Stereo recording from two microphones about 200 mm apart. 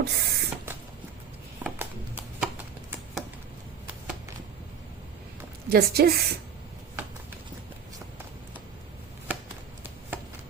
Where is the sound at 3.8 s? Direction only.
10° right (ahead or behind).